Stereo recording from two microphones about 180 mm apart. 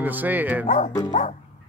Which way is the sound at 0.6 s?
40° left (ahead or behind).